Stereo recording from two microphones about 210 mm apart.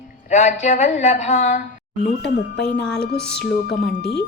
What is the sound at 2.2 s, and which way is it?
Speech, 55° left (ahead or behind).